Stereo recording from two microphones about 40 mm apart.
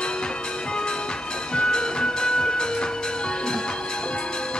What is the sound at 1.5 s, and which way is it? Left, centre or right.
Music, left.